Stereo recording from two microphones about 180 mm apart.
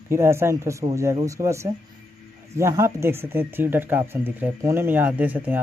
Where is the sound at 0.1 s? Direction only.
15° right (ahead or behind).